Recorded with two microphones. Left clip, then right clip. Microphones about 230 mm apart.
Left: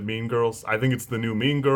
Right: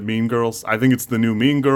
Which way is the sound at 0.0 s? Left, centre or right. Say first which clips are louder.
Right 4 dB; right.